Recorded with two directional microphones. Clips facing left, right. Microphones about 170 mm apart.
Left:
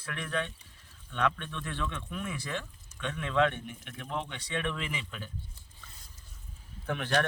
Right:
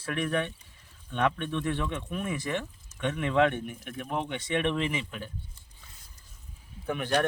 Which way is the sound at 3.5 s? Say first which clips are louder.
Right 6 dB; 45° right (ahead or behind).